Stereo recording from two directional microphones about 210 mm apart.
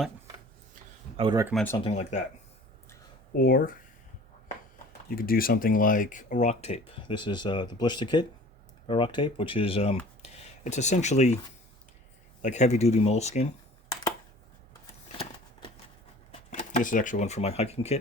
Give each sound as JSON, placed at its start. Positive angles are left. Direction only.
{"t": 1.1, "sound": "speech", "side_deg": -20}
{"t": 1.8, "sound": "speech", "side_deg": 30}
{"t": 3.3, "sound": "speech", "side_deg": 45}
{"t": 5.0, "sound": "speech", "side_deg": 45}
{"t": 12.4, "sound": "speech", "side_deg": 35}
{"t": 16.3, "sound": "speech", "side_deg": 35}